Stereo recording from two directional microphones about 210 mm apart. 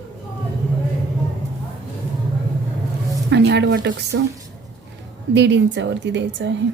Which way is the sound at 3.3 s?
55° right (ahead or behind).